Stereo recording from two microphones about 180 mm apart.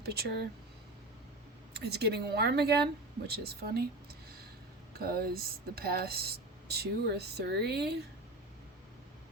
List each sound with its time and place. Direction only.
0.0 s a sound: 60° right (ahead or behind)
1.7 s speech: 65° right (ahead or behind)
4.9 s speech: 55° right (ahead or behind)